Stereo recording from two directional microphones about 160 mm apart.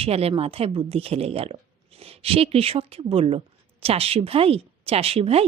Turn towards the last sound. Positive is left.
turn(degrees=-40)  # may be behind; listen again after turning